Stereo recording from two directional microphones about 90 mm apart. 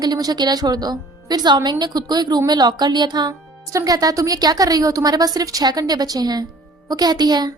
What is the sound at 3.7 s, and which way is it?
A woman's voice, 40° right (ahead or behind).